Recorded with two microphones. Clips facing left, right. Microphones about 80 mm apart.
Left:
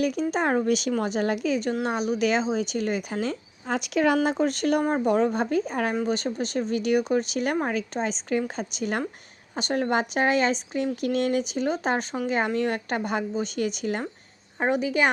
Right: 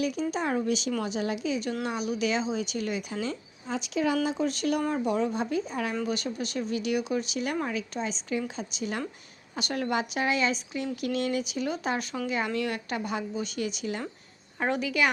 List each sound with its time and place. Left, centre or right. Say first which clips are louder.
0.0 s speech: left 4 dB; left
5.9 s a woman's voice: left 4 dB; left
6.1 s speech: left 4 dB; left
9.6 s speech: left 4 dB; left
12.5 s speech: left 4 dB; left
14.6 s a woman's voice: left 4 dB; left